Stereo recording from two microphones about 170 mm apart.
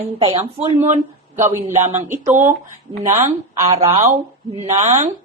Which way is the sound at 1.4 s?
15° right (ahead or behind).